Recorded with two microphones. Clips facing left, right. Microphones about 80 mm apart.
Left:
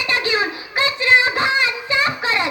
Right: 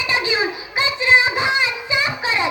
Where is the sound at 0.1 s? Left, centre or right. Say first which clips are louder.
Left 1 dB; centre.